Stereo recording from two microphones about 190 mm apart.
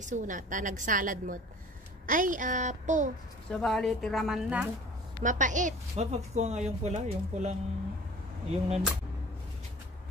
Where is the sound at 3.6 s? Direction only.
Centre (ahead or behind).